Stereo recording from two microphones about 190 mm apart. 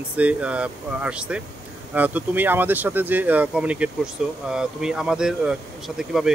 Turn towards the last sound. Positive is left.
turn(degrees=0)  # may be behind; listen again after turning